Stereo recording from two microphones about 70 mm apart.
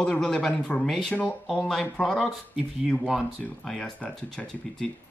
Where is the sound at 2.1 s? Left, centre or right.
Centre.